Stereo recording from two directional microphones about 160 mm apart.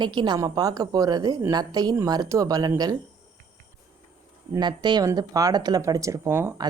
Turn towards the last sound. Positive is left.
turn(degrees=-15)  # may be behind; listen again after turning